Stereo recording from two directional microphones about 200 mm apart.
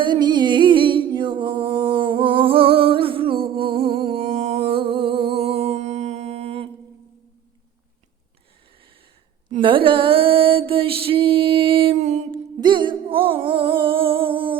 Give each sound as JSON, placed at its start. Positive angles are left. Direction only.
{"t": 0.0, "sound": "a sound", "side_deg": -20}
{"t": 9.5, "sound": "mantra", "side_deg": -25}
{"t": 12.5, "sound": "music", "side_deg": -25}